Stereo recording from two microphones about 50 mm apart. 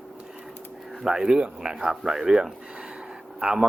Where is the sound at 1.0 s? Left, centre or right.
Centre.